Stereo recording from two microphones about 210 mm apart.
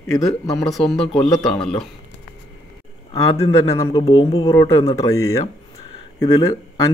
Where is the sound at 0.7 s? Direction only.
Centre (ahead or behind).